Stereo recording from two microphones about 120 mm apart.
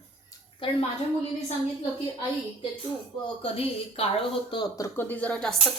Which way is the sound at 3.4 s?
55° left (ahead or behind).